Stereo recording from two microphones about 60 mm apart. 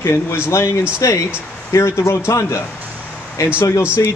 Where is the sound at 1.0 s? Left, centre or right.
Left.